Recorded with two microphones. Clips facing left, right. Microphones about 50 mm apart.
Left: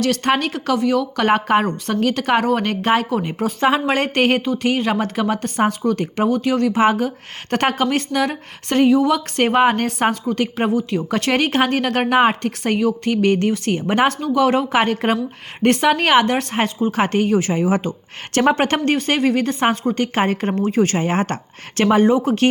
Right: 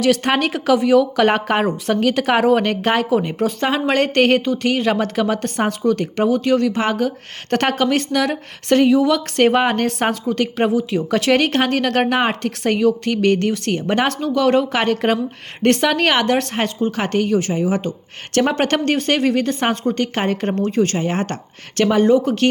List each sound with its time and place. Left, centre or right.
0.0 s a woman's voice: centre; by 17.9 s left
18.4 s a woman's voice: centre
20.8 s speech: left